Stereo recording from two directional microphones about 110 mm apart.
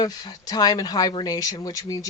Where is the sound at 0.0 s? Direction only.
35° left (ahead or behind).